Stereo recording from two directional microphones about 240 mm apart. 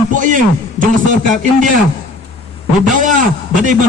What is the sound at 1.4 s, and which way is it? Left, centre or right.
Speech, right.